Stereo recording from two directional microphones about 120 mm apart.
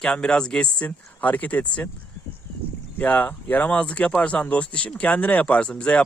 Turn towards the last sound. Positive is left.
turn(degrees=10)  # may be behind; listen again after turning